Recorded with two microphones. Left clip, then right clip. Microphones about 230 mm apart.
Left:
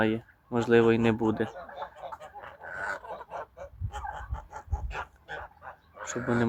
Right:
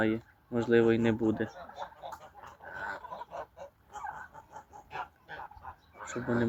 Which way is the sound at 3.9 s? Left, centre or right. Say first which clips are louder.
Left 3 dB; left.